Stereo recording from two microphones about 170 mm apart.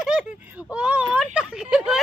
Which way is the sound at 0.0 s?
5° right (ahead or behind).